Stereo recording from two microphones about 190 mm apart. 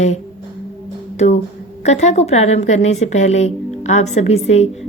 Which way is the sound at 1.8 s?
35° left (ahead or behind).